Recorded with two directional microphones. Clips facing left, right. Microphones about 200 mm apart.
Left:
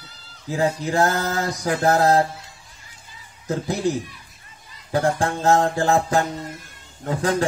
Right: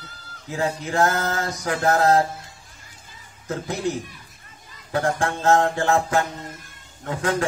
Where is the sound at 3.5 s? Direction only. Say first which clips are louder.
Left 3 dB; 35° left (ahead or behind).